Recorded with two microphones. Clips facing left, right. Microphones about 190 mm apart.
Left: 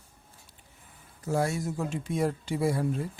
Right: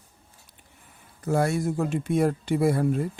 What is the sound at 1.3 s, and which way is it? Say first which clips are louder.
Speech: right 4 dB; 60° right (ahead or behind).